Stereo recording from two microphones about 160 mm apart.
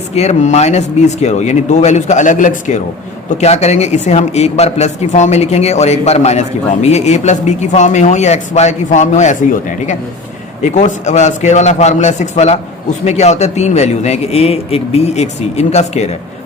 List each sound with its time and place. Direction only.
0.2 s a man's voice: 45° left (ahead or behind)